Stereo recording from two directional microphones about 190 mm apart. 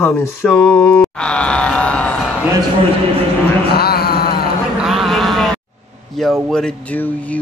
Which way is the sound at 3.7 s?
55° left (ahead or behind).